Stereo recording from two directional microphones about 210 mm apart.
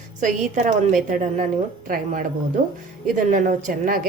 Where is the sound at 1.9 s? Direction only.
40° right (ahead or behind).